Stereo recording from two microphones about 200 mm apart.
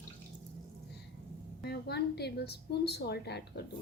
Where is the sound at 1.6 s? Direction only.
55° left (ahead or behind).